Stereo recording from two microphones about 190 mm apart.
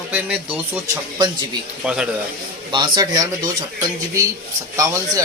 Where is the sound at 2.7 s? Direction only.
25° right (ahead or behind).